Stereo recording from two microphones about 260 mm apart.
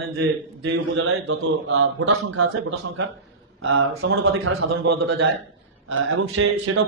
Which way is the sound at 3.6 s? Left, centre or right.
Right.